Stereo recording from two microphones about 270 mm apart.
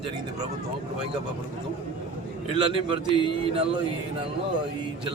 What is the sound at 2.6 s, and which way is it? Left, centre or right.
A man's voice, centre.